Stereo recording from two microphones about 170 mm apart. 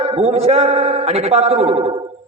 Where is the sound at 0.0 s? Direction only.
40° right (ahead or behind).